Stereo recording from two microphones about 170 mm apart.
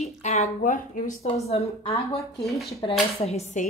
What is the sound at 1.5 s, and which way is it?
Speech, 35° left (ahead or behind).